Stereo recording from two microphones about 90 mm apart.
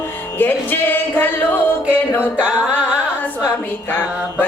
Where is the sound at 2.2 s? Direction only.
15° right (ahead or behind).